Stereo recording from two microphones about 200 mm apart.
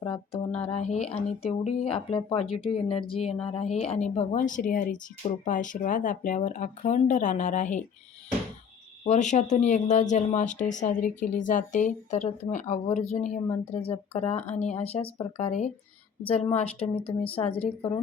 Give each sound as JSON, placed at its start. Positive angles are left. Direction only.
{"t": 0.0, "sound": "a sound", "side_deg": 30}
{"t": 0.6, "sound": "speech", "side_deg": 35}
{"t": 9.0, "sound": "speech", "side_deg": 35}